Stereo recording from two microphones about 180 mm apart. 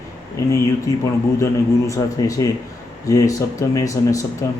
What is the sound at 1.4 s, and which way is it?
Speech, 15° left (ahead or behind).